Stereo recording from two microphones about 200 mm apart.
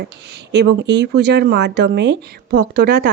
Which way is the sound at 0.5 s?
60° right (ahead or behind).